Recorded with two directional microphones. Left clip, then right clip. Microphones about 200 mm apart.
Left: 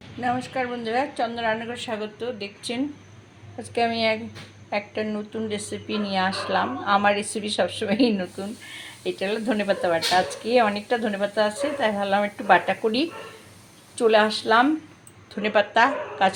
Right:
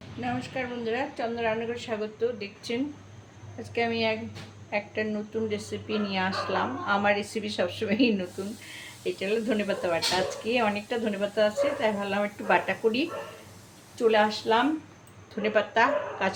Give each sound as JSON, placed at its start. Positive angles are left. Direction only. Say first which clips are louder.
{"t": 0.2, "sound": "a woman's voice", "louder": "left 6 dB", "side_deg": 15}
{"t": 9.1, "sound": "a woman's voice", "louder": "left 2 dB", "side_deg": 25}